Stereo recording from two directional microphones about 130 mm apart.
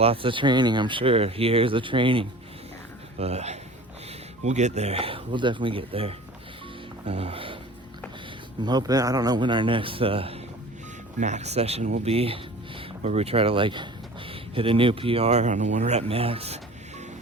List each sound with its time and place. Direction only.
0.0 s speech: 45° right (ahead or behind)
3.2 s speech: 55° right (ahead or behind)
8.6 s speech: 30° right (ahead or behind); by 10.3 s 45° right (ahead or behind)
11.2 s speech: 60° right (ahead or behind)